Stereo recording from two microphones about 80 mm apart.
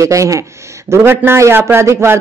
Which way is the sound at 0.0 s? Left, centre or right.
Right.